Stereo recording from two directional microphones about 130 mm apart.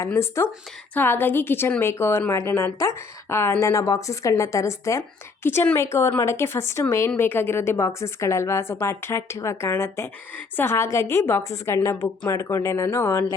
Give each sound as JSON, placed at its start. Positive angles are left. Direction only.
{"t": 0.0, "sound": "a woman's voice", "side_deg": 20}